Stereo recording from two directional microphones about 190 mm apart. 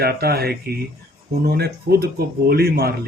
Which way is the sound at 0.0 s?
55° right (ahead or behind).